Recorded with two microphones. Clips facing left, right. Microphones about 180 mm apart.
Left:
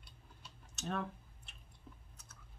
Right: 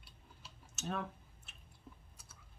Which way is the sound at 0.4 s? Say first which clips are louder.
Even; 5° right (ahead or behind).